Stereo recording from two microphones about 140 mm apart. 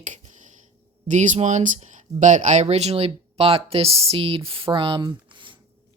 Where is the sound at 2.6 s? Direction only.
50° right (ahead or behind).